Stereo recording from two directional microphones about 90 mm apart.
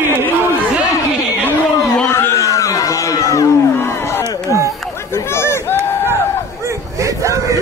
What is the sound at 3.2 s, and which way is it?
Music, 35° left (ahead or behind).